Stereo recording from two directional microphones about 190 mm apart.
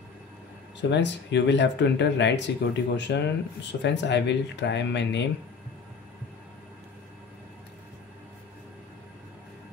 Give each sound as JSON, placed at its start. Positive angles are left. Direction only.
{"t": 0.7, "sound": "speech", "side_deg": 65}